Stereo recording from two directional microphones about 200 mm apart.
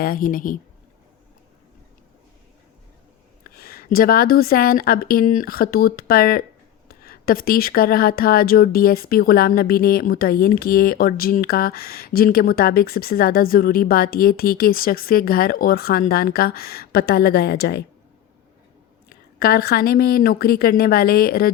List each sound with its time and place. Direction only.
0.0 s speech: 45° left (ahead or behind)
3.4 s speech: 50° left (ahead or behind)
19.0 s speech: 50° left (ahead or behind)